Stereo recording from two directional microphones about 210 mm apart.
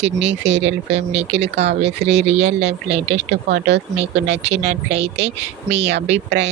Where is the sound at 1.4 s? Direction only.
55° right (ahead or behind).